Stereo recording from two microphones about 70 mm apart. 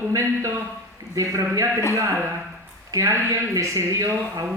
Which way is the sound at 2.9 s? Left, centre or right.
Right.